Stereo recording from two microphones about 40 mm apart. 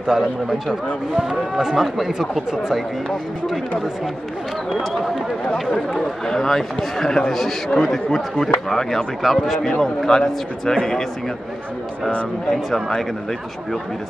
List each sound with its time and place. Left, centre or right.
0.0 s a man's voice: centre
5.9 s a man's voice: centre